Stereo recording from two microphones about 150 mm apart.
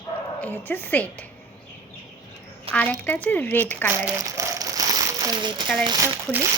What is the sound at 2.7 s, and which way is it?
Speech, 10° left (ahead or behind).